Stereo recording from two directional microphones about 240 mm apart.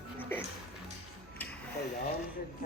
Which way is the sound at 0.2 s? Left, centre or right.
Centre.